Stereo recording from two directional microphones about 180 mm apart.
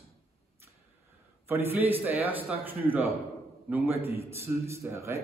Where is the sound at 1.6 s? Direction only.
10° right (ahead or behind).